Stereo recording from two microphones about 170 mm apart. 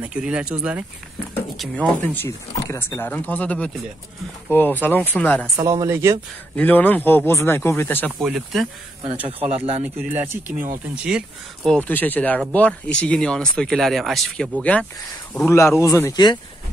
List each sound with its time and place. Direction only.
0.0 s speech: 5° right (ahead or behind)
1.6 s speech: 10° left (ahead or behind)
5.6 s speech: 20° right (ahead or behind)
6.5 s speech: 10° left (ahead or behind)
8.2 s speech: centre (ahead or behind)
9.5 s speech: 35° right (ahead or behind)
11.1 s speech: centre (ahead or behind); by 16.3 s 25° left (ahead or behind)